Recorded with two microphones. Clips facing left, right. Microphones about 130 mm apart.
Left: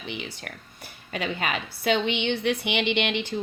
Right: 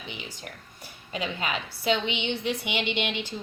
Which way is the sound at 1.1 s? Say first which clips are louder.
Left 2 dB; 60° left (ahead or behind).